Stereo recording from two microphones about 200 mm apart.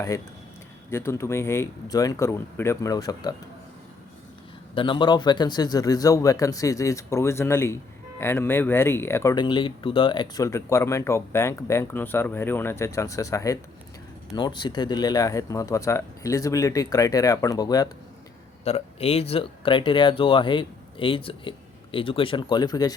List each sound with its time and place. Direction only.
0.9 s speech: 10° left (ahead or behind)
4.7 s speech: 25° left (ahead or behind)
18.6 s speech: 30° left (ahead or behind)